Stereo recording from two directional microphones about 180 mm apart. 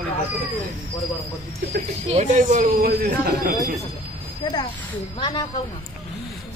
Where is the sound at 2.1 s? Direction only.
45° right (ahead or behind); by 3.5 s 60° right (ahead or behind).